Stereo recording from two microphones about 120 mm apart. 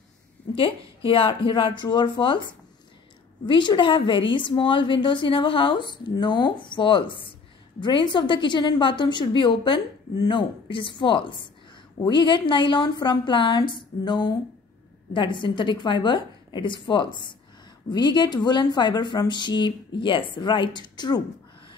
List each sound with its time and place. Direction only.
0.6 s a woman's voice: 50° left (ahead or behind)
3.4 s a woman's voice: 40° left (ahead or behind)